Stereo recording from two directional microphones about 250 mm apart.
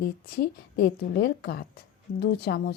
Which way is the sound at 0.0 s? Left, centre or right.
Left.